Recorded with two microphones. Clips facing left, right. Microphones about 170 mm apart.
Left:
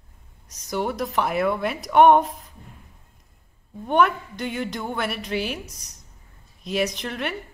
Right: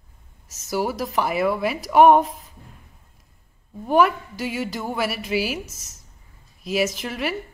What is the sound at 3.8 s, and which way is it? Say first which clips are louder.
A woman's voice: right 2 dB; 5° right (ahead or behind).